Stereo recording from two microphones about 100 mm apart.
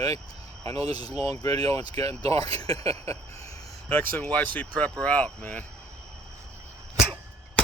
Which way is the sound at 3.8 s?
15° left (ahead or behind).